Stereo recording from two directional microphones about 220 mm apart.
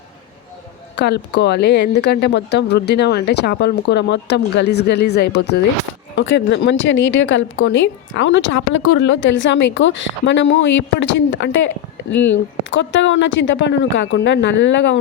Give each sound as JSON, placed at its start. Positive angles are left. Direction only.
{"t": 0.9, "sound": "speech", "side_deg": 50}
{"t": 12.7, "sound": "speech", "side_deg": 55}